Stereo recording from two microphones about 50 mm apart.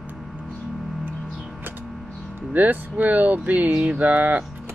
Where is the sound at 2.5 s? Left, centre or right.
Right.